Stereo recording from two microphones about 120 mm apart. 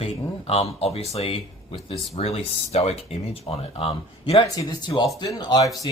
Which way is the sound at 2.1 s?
60° left (ahead or behind).